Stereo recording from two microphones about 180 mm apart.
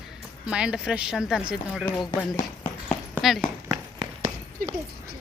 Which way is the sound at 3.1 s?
Centre (ahead or behind).